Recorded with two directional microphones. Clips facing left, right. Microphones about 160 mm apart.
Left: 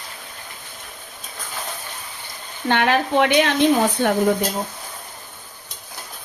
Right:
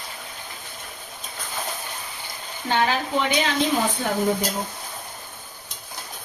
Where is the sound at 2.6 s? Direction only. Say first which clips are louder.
Left 4 dB; 70° left (ahead or behind).